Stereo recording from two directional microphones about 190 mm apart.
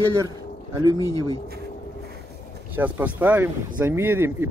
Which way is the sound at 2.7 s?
10° right (ahead or behind).